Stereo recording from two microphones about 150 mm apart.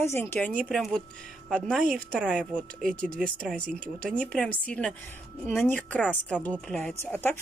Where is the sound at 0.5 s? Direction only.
Centre (ahead or behind).